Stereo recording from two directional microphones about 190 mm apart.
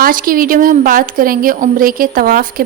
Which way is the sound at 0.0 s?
45° right (ahead or behind).